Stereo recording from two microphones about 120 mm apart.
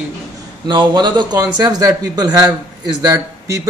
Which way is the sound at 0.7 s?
40° right (ahead or behind).